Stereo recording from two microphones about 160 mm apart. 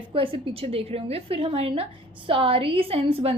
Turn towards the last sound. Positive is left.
turn(degrees=-35)  # may be behind; listen again after turning